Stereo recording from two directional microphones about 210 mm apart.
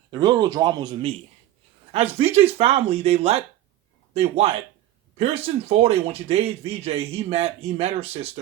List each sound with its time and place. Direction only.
0.1 s a man's voice: 20° right (ahead or behind)